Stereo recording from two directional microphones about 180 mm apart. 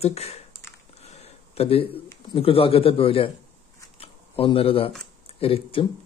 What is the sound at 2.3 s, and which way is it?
Speech, 30° left (ahead or behind).